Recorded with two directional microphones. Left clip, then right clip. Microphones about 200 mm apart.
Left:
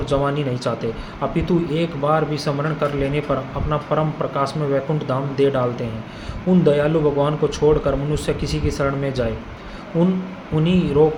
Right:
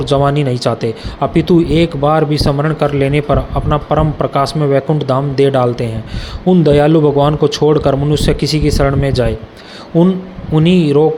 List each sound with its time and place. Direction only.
0.0 s speech: 45° right (ahead or behind)
10.5 s speech: 45° right (ahead or behind)